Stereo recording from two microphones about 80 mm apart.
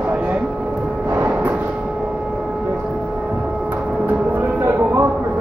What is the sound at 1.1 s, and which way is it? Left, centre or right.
Vehicle, right.